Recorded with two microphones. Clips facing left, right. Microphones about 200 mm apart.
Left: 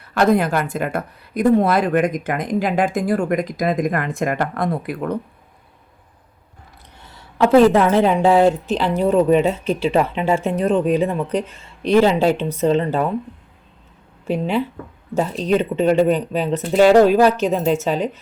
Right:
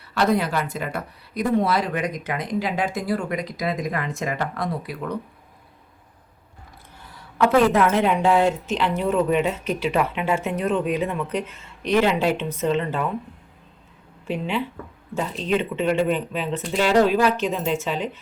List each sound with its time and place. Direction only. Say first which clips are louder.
0.0 s speech: left 5 dB; 50° left (ahead or behind)
7.3 s speech: left 5 dB; 30° left (ahead or behind)
14.3 s speech: left 5 dB; 40° left (ahead or behind)